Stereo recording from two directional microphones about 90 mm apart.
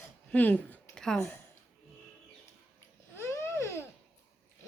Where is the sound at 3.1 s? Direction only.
30° left (ahead or behind).